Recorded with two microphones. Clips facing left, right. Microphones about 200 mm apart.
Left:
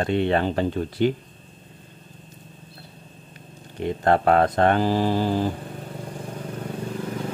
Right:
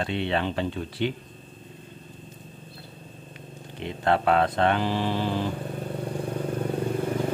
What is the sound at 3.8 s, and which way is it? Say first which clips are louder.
Speech: left 4 dB; 45° left (ahead or behind).